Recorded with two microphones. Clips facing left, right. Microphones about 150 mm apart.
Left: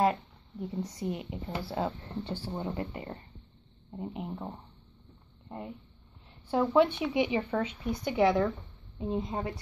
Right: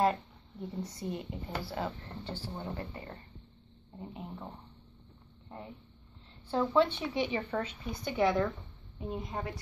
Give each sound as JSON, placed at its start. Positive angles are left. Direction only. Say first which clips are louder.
{"t": 0.0, "sound": "speech", "louder": "left 2 dB", "side_deg": 10}
{"t": 6.5, "sound": "speech", "louder": "left 3 dB", "side_deg": 15}
{"t": 9.1, "sound": "speech", "louder": "left 5 dB", "side_deg": 25}